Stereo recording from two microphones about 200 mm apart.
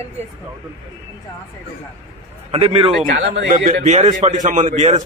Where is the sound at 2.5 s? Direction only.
25° right (ahead or behind).